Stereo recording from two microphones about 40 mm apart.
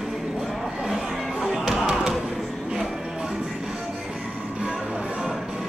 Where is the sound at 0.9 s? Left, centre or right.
Centre.